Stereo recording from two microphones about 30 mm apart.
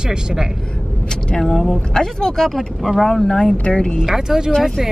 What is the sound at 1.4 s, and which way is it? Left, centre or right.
Speech, centre.